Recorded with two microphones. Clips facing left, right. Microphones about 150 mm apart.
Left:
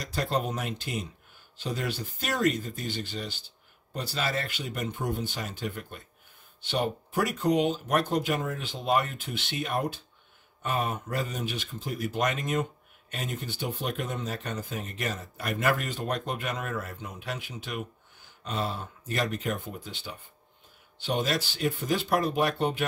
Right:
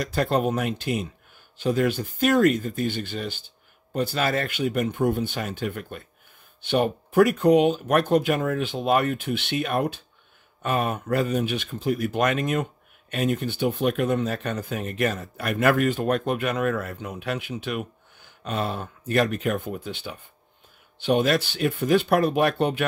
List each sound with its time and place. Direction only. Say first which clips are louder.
0.0 s speech: right 7 dB; 60° right (ahead or behind)